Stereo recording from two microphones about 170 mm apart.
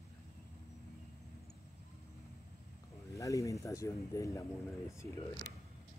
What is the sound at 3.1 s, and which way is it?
Speech, 20° left (ahead or behind).